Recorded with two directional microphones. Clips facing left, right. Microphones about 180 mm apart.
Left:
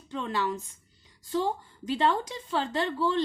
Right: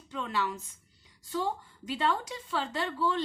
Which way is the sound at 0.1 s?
30° left (ahead or behind).